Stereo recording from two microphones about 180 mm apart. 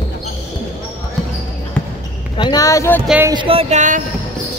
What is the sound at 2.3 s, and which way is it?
Speech, 25° left (ahead or behind).